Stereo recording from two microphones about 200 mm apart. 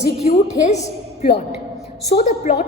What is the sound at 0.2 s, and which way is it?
Speech, 35° left (ahead or behind).